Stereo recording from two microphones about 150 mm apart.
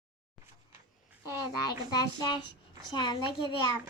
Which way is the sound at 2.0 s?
30° left (ahead or behind).